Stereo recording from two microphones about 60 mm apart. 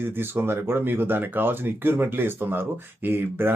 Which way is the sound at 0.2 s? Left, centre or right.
Right.